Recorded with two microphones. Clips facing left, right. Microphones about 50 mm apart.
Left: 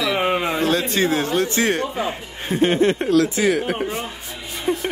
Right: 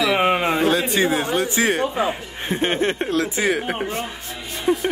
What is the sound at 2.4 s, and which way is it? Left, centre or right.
Speech, right.